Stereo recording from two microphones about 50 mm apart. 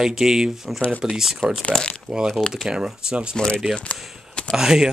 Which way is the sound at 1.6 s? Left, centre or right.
Left.